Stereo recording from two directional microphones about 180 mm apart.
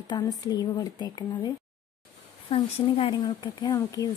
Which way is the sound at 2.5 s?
30° left (ahead or behind).